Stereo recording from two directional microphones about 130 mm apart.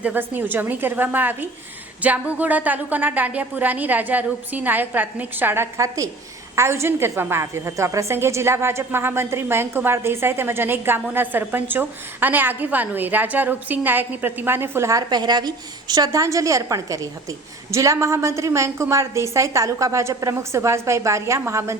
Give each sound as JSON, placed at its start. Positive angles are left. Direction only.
{"t": 0.0, "sound": "a woman's voice", "side_deg": -15}